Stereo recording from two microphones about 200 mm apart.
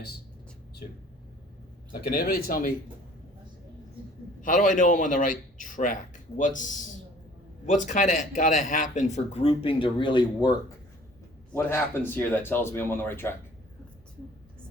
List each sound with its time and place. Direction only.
1.9 s speech: 45° left (ahead or behind)
4.4 s a man's voice: 40° left (ahead or behind)
7.7 s a man's voice: 40° left (ahead or behind); by 10.5 s 25° left (ahead or behind)
11.5 s speech: 10° left (ahead or behind)